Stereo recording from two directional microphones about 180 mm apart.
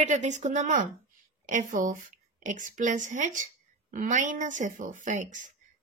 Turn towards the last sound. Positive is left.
turn(degrees=-45)  # may be behind; listen again after turning